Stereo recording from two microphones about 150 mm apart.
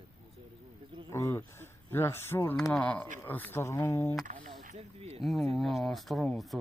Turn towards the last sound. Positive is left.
turn(degrees=0)  # may be behind; listen again after turning